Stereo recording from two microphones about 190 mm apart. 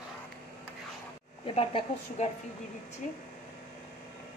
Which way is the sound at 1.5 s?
30° left (ahead or behind).